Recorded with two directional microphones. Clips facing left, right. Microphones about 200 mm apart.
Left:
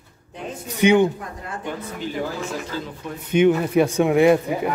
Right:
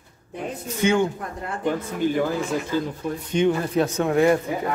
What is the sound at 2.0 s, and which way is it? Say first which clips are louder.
Speech: right 7 dB; 50° right (ahead or behind).